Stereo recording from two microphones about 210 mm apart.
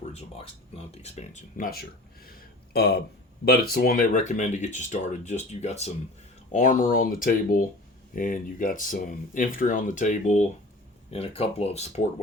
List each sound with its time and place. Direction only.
0.1 s speech: 30° left (ahead or behind)